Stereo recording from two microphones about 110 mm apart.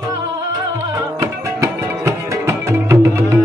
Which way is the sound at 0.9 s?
30° right (ahead or behind).